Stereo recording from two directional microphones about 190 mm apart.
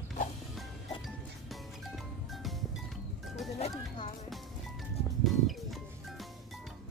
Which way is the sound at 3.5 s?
35° left (ahead or behind).